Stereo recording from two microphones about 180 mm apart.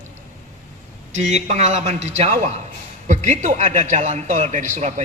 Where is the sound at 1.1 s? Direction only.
40° right (ahead or behind).